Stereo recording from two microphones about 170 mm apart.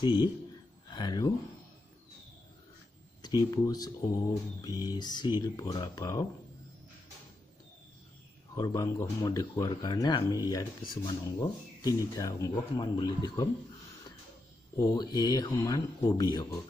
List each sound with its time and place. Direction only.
0.0 s speech: 25° left (ahead or behind)
3.2 s speech: 25° left (ahead or behind)
8.5 s speech: 20° left (ahead or behind)
14.8 s speech: 25° left (ahead or behind)